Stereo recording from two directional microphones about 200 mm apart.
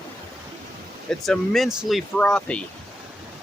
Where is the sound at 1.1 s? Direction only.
Centre (ahead or behind).